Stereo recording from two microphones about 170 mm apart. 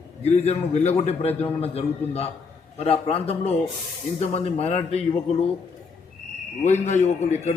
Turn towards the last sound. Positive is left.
turn(degrees=45)  # may be behind; listen again after turning